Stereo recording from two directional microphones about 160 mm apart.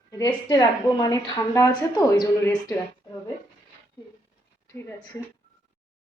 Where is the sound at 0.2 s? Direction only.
25° left (ahead or behind).